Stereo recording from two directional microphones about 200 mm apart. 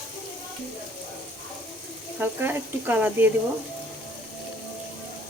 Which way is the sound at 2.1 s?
10° right (ahead or behind).